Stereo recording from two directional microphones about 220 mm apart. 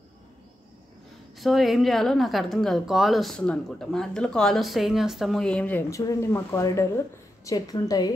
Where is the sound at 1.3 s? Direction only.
Centre (ahead or behind).